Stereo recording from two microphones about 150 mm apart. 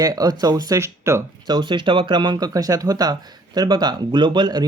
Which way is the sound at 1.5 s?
30° right (ahead or behind).